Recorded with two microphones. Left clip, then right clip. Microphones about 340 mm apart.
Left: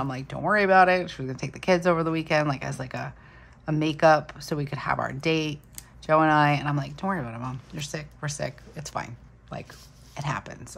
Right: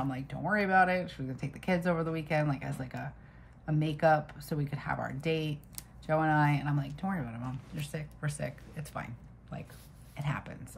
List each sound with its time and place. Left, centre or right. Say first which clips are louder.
0.1 s speech: left 8 dB; centre